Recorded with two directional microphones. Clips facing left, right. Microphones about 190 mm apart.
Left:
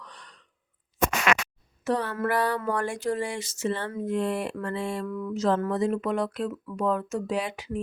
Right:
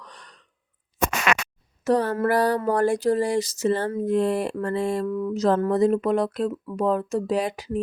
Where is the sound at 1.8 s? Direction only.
40° right (ahead or behind).